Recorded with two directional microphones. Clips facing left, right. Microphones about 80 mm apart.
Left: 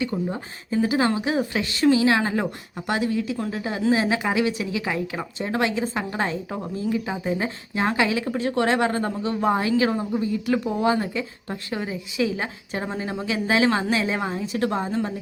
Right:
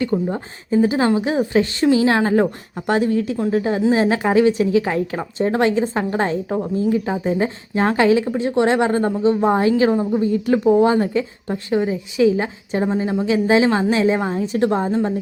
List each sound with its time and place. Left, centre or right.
0.1 s a woman's voice: right
9.9 s speech: centre
10.2 s a woman's voice: right
14.8 s speech: centre